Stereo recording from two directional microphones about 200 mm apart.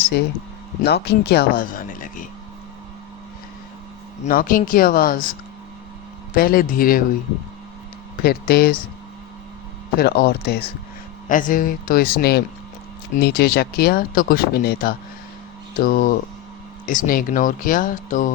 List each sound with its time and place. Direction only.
0.8 s speech: 55° left (ahead or behind)
4.2 s speech: 45° left (ahead or behind)
6.3 s speech: 45° left (ahead or behind)
8.2 s speech: 50° left (ahead or behind)
10.0 s speech: 50° left (ahead or behind)
11.3 s speech: 40° left (ahead or behind)